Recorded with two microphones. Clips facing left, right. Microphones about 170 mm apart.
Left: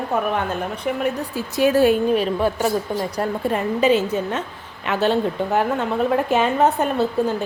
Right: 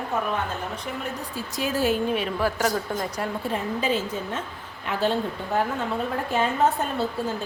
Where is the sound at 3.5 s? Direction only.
70° left (ahead or behind).